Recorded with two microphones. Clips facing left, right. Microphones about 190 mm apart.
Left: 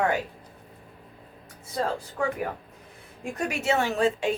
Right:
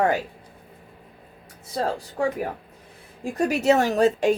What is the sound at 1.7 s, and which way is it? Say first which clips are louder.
A woman's voice: right 2 dB; 35° right (ahead or behind).